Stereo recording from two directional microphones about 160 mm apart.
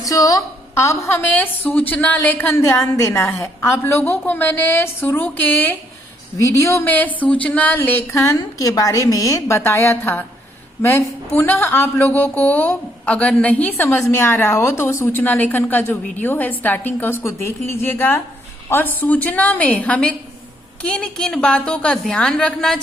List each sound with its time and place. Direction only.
0.0 s a woman's voice: 20° left (ahead or behind)
11.3 s a woman's voice: 10° left (ahead or behind)